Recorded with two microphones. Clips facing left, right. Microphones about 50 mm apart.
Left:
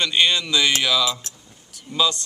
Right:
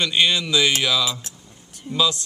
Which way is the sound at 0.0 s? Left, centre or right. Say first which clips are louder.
Even; centre.